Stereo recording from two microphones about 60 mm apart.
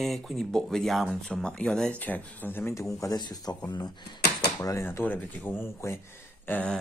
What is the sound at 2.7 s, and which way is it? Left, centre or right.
Speech, left.